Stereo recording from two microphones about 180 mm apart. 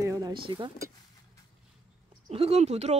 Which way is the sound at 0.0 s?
20° right (ahead or behind).